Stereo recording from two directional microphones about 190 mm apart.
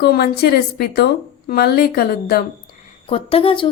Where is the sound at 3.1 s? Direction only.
30° left (ahead or behind).